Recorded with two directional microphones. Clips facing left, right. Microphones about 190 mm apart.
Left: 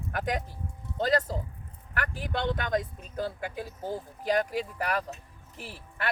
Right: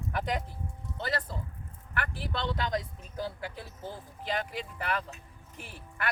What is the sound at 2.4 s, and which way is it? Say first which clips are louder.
Speech: left 3 dB; 50° left (ahead or behind).